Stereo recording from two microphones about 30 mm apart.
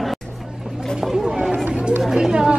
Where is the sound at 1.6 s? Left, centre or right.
Right.